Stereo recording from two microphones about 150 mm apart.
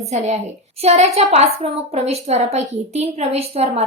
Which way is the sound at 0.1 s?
50° right (ahead or behind).